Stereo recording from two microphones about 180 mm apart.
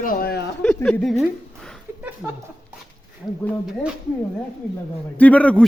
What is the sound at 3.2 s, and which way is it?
Speech, 25° left (ahead or behind).